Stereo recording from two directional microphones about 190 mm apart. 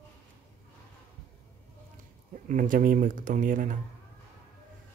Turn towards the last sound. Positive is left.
turn(degrees=-45)  # may be behind; listen again after turning